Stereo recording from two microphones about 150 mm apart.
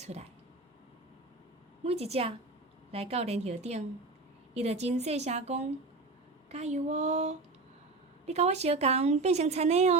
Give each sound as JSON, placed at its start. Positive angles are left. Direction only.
{"t": 0.0, "sound": "speech", "side_deg": -45}
{"t": 1.8, "sound": "a woman's voice", "side_deg": -45}